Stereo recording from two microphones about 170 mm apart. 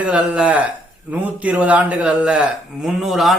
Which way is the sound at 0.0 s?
5° right (ahead or behind).